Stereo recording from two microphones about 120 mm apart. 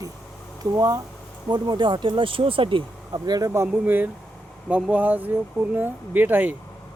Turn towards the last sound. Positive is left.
turn(degrees=-15)  # may be behind; listen again after turning